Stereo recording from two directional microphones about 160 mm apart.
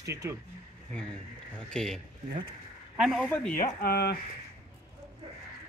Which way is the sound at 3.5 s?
75° left (ahead or behind).